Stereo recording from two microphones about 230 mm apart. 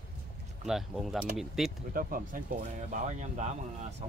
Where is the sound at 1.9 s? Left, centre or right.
Right.